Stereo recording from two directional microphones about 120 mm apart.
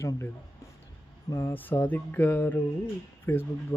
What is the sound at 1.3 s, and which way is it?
Speech, 25° left (ahead or behind).